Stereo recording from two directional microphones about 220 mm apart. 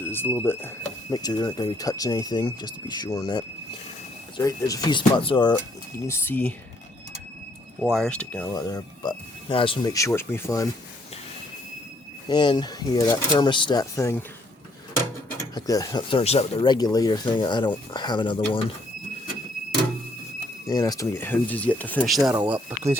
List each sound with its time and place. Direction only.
0.0 s a sound: 10° left (ahead or behind)
0.5 s speech: 10° left (ahead or behind)
6.1 s speech: 10° left (ahead or behind)
7.8 s speech: centre (ahead or behind)
8.5 s speech: 15° left (ahead or behind)
12.3 s speech: 20° left (ahead or behind)
20.7 s speech: 15° left (ahead or behind); by 23.0 s 10° right (ahead or behind)